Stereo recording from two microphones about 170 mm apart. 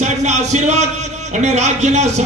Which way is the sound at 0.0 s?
45° right (ahead or behind).